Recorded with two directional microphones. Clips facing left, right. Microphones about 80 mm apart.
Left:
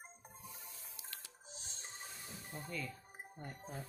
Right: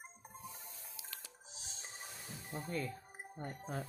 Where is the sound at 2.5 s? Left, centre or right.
Right.